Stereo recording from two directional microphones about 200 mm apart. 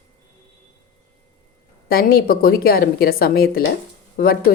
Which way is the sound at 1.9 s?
45° left (ahead or behind).